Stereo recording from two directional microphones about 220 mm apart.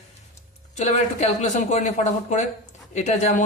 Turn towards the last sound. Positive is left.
turn(degrees=35)  # may be behind; listen again after turning